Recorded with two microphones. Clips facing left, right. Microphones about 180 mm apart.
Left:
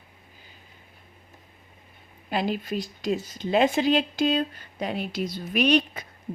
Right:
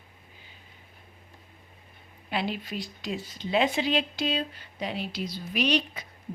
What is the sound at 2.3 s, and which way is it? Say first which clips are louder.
Speech: left 4 dB; 45° left (ahead or behind).